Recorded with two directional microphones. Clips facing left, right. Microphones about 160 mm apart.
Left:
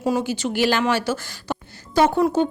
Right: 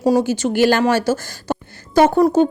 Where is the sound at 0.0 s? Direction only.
40° right (ahead or behind).